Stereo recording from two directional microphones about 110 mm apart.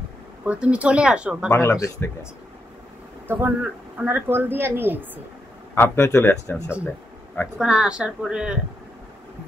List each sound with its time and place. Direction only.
0.5 s speech: 10° right (ahead or behind)
1.5 s speech: 25° left (ahead or behind)
3.3 s a woman's voice: 20° right (ahead or behind)
5.8 s speech: 20° left (ahead or behind)
7.5 s speech: 5° right (ahead or behind)